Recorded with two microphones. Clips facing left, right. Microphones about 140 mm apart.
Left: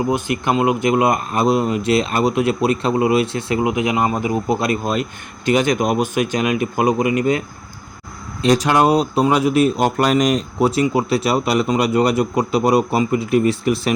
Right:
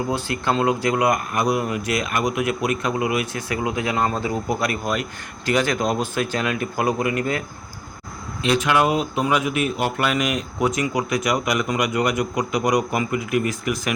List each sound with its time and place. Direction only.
0.1 s speech: 20° left (ahead or behind)
8.4 s speech: 35° left (ahead or behind)